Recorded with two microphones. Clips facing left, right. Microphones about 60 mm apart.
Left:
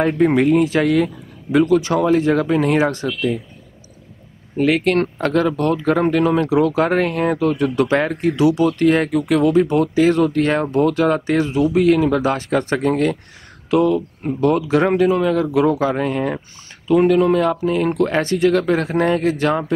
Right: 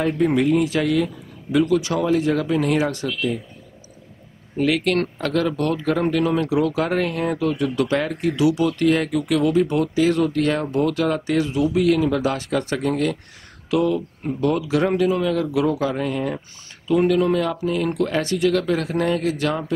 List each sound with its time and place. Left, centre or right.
0.0 s speech: left
4.6 s speech: left